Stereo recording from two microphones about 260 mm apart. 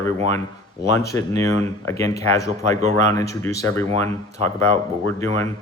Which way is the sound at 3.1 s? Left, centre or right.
Centre.